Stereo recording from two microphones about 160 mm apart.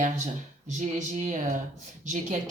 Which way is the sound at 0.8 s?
50° right (ahead or behind).